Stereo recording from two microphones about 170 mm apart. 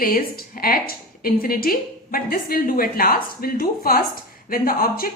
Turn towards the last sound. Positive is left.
turn(degrees=60)  # may be behind; listen again after turning